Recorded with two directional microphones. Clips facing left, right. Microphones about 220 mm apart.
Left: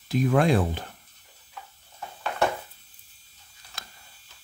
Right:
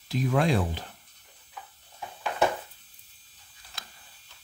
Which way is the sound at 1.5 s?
5° right (ahead or behind).